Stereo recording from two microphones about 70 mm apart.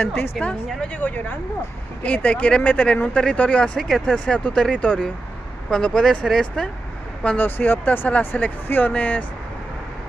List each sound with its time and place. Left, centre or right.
0.4 s speech: centre
0.7 s speech: left; by 6.4 s centre
7.2 s speech: left